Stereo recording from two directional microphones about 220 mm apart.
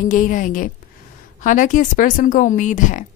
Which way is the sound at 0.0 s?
35° left (ahead or behind).